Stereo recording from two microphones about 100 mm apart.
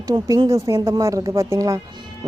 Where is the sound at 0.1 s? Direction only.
35° right (ahead or behind).